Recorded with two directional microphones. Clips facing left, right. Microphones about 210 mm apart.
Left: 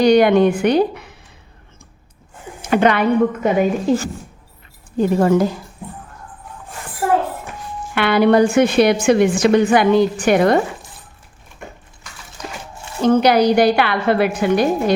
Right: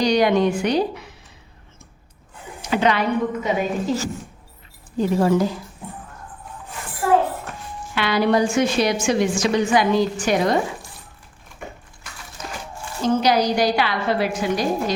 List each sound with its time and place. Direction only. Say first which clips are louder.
0.0 s a woman's voice: left 6 dB; 55° left (ahead or behind)
2.6 s a woman's voice: left 5 dB; 55° left (ahead or behind)
7.9 s a woman's voice: left 6 dB; 60° left (ahead or behind)
13.0 s a woman's voice: left 5 dB; 60° left (ahead or behind)